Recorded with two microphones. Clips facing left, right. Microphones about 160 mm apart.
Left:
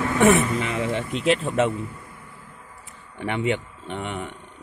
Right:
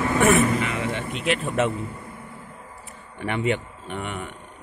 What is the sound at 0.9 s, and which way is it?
Speech, 35° left (ahead or behind).